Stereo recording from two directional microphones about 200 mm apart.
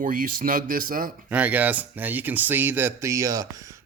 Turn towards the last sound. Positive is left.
turn(degrees=-15)  # may be behind; listen again after turning